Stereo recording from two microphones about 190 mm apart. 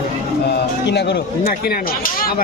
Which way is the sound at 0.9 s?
65° left (ahead or behind).